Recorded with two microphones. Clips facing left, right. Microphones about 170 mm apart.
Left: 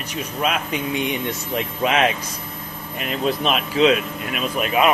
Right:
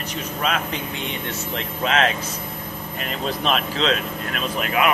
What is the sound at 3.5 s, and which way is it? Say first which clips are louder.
Speech: left 4 dB; 10° left (ahead or behind).